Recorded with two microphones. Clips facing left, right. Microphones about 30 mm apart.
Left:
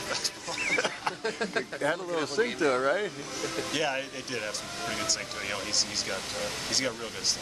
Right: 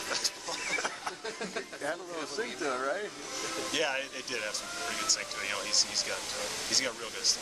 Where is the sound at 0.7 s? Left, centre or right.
Left.